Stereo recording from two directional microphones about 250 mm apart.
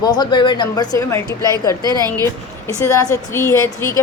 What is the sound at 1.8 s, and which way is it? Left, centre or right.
Speech, centre.